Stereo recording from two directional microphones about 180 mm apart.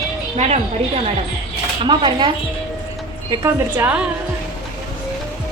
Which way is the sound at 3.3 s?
15° right (ahead or behind).